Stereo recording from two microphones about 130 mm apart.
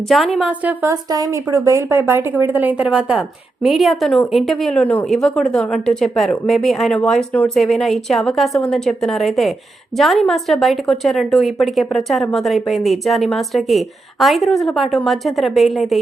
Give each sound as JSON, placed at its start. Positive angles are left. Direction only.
{"t": 0.1, "sound": "a woman's voice", "side_deg": 0}
{"t": 0.6, "sound": "a woman's voice", "side_deg": -15}
{"t": 1.1, "sound": "a woman's voice", "side_deg": -25}